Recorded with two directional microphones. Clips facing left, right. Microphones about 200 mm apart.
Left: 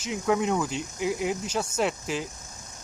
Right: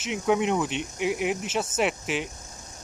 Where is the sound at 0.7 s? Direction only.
80° right.